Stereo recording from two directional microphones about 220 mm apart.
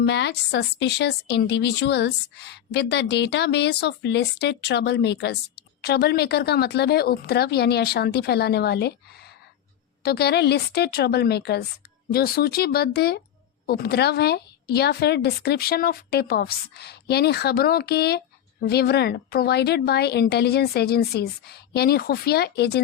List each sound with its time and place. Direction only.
0.0 s a woman's voice: 50° left (ahead or behind)